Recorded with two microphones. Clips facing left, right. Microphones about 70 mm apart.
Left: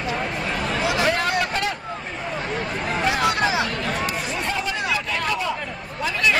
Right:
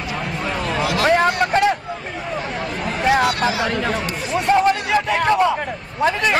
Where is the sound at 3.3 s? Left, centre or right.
Left.